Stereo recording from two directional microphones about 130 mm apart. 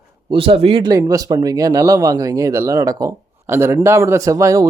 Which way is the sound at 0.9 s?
25° right (ahead or behind).